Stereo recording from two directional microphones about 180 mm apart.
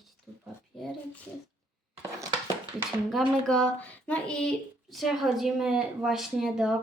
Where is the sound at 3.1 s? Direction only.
Centre (ahead or behind).